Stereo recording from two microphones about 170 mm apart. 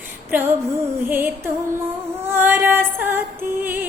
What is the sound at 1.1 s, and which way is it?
Music, 10° right (ahead or behind).